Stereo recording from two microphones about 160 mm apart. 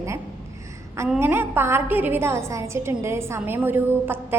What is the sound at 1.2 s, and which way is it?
A woman's voice, 15° right (ahead or behind).